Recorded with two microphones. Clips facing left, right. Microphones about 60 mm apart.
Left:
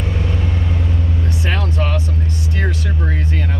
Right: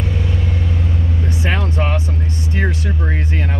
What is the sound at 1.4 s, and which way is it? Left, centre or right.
Vehicle, right.